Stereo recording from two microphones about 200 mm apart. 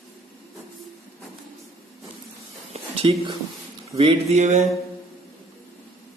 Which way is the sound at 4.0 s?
30° right (ahead or behind).